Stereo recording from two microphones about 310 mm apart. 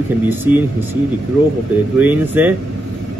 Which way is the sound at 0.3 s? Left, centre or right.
Centre.